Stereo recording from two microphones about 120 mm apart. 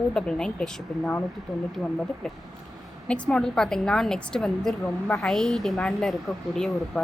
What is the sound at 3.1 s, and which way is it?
A woman's voice, 5° left (ahead or behind).